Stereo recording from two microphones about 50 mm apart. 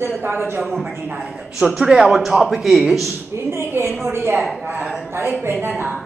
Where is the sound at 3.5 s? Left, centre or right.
Right.